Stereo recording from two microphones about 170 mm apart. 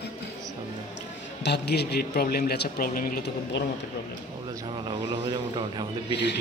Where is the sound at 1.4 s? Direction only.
75° left (ahead or behind).